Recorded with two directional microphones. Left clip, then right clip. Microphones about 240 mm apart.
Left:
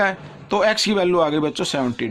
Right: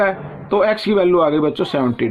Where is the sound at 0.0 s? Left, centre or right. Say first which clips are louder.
Right 3 dB; left.